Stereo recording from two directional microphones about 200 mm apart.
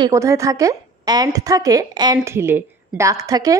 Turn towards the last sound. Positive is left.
turn(degrees=-20)  # may be behind; listen again after turning